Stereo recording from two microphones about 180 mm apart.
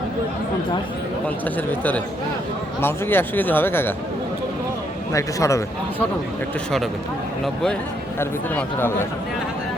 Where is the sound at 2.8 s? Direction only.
10° left (ahead or behind).